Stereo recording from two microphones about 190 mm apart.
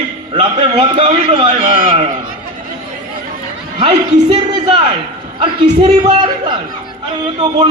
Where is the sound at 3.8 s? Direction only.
30° right (ahead or behind).